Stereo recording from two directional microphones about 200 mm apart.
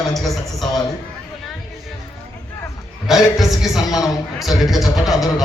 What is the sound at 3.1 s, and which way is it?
Music, centre (ahead or behind).